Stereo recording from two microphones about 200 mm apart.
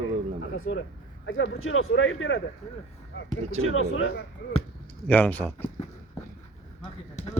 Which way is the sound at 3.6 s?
90° left.